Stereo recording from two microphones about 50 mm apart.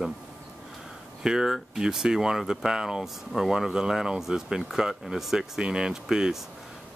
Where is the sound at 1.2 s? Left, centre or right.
Centre.